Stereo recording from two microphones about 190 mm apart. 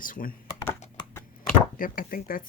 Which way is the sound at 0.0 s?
45° left (ahead or behind).